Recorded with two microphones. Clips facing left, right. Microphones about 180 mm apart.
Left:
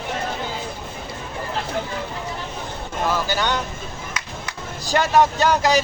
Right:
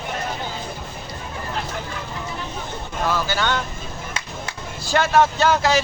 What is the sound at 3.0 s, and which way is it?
Vehicle, 15° left (ahead or behind).